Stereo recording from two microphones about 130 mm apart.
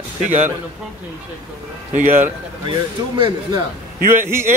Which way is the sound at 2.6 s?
35° right (ahead or behind).